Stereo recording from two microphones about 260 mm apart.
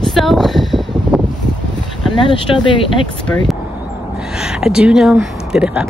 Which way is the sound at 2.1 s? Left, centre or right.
Centre.